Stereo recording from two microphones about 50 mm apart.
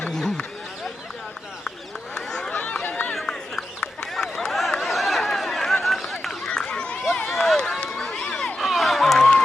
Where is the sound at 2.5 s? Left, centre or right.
Left.